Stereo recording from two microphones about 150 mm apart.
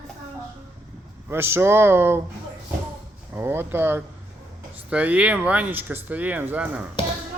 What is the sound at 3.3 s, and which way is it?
Speech, 15° right (ahead or behind).